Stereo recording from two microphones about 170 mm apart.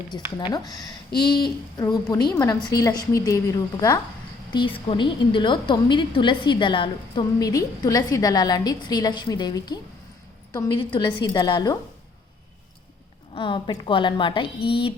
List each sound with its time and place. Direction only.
0.5 s a woman's voice: 20° left (ahead or behind)
13.3 s a woman's voice: 30° left (ahead or behind)